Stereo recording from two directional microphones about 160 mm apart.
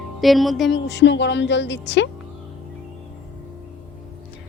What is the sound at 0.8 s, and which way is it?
A woman's voice, 90° left.